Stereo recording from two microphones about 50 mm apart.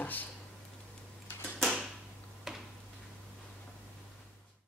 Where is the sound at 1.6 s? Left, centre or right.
Centre.